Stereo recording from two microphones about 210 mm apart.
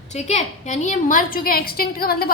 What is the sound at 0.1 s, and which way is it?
A woman's voice, 35° left (ahead or behind).